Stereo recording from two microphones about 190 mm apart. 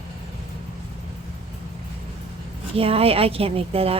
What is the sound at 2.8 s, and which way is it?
Speech, 30° right (ahead or behind).